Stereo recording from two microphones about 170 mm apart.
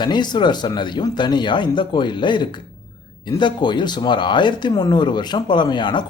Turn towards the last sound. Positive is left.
turn(degrees=25)  # may be behind; listen again after turning